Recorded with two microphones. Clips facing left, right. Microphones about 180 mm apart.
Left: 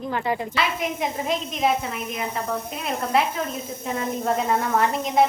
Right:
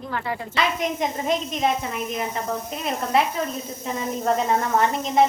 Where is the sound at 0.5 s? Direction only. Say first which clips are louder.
Right 1 dB; 5° left (ahead or behind).